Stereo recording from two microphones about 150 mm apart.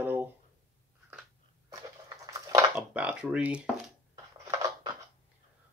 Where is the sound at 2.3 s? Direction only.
20° right (ahead or behind).